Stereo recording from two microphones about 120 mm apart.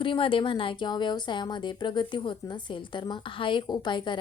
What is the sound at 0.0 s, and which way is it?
A woman's voice, 45° left (ahead or behind).